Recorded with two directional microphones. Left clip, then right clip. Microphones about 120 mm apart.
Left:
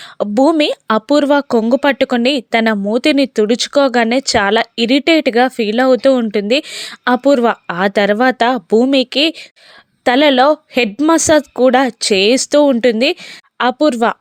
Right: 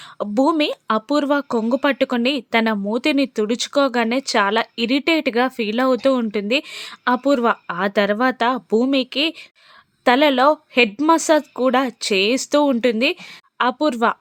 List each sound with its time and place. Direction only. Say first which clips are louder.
0.2 s speech: left 6 dB; 35° left (ahead or behind)